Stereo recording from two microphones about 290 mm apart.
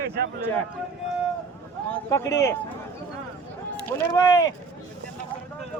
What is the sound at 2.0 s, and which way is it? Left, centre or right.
Speech, centre.